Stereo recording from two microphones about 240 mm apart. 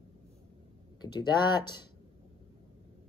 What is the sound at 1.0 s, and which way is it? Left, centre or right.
Speech, centre.